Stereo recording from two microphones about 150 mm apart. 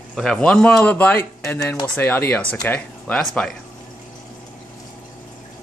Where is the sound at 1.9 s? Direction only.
15° left (ahead or behind).